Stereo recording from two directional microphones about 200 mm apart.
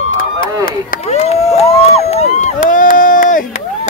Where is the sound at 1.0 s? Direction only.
30° left (ahead or behind).